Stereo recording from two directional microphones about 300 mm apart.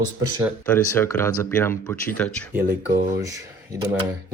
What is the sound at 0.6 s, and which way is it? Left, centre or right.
Speech, centre.